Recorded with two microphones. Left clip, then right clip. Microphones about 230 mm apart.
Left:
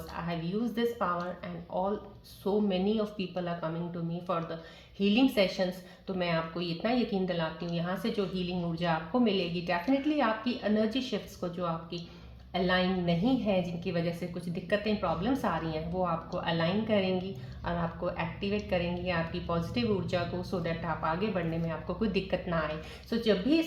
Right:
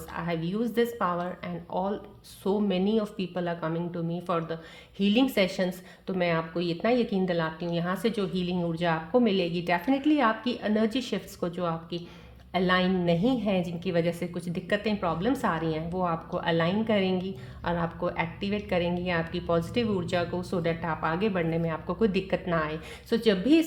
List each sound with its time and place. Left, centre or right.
0.3 s a woman's voice: right